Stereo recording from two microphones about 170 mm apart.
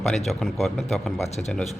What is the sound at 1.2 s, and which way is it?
Speech, 40° left (ahead or behind).